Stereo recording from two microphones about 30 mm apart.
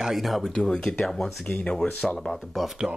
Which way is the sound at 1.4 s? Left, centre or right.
Left.